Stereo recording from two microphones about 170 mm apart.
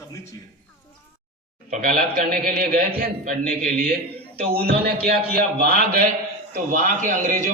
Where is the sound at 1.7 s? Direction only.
55° right (ahead or behind).